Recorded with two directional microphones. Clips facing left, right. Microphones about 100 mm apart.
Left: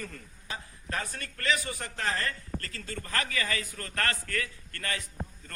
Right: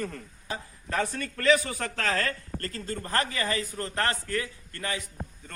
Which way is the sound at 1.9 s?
90° right.